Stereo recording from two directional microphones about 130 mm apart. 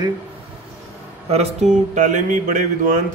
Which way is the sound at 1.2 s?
55° right (ahead or behind).